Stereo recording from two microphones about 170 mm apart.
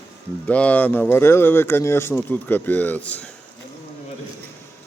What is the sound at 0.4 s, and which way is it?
Speech, 10° left (ahead or behind).